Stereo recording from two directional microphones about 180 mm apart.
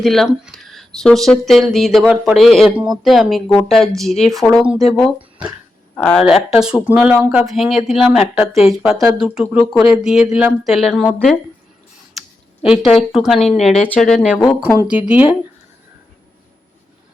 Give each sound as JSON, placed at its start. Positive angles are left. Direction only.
{"t": 0.0, "sound": "speech", "side_deg": 0}
{"t": 5.9, "sound": "speech", "side_deg": 5}
{"t": 12.6, "sound": "speech", "side_deg": -5}